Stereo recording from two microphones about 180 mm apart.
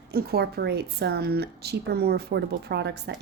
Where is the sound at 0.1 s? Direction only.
60° right (ahead or behind).